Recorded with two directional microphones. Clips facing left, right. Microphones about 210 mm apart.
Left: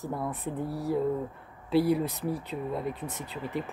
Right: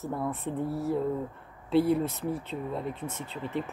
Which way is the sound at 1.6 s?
5° left (ahead or behind).